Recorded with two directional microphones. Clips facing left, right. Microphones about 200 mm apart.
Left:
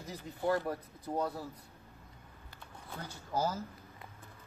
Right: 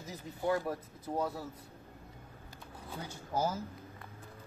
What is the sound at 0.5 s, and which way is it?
Speech, 5° right (ahead or behind).